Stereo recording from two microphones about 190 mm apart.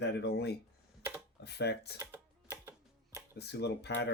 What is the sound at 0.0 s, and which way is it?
Speech, 60° left (ahead or behind).